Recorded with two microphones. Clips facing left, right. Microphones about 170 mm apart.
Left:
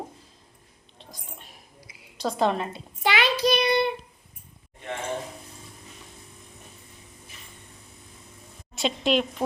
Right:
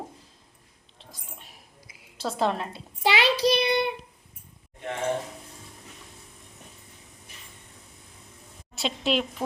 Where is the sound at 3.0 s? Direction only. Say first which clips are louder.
Right 1 dB; 30° right (ahead or behind).